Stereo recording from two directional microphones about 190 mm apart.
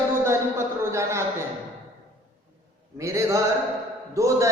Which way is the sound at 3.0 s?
15° right (ahead or behind).